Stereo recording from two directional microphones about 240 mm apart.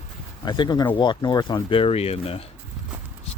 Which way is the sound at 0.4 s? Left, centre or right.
Centre.